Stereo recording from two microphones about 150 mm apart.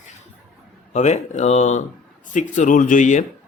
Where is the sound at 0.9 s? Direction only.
50° left (ahead or behind).